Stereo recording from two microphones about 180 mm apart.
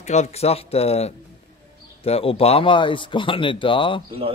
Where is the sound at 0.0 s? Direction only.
40° left (ahead or behind).